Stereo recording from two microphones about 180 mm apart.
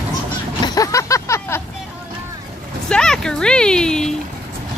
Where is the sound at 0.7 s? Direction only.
20° left (ahead or behind).